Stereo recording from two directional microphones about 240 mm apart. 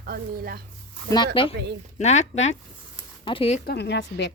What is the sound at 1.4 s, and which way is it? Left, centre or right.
Speech, left.